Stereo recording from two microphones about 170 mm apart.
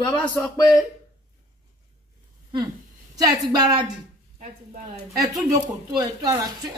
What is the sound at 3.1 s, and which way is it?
Speech, 20° right (ahead or behind).